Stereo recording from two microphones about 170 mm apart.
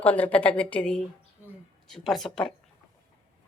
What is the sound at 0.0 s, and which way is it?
A woman's voice, 10° left (ahead or behind).